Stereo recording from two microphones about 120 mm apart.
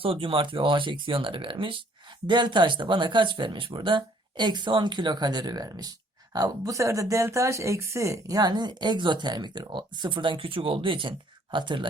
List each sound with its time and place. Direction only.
0.0 s speech: 50° right (ahead or behind)